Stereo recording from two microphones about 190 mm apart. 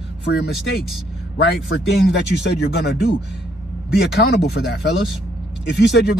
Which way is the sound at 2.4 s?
60° left (ahead or behind).